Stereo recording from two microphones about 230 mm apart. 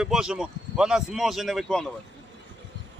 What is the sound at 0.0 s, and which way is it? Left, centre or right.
Speech, centre.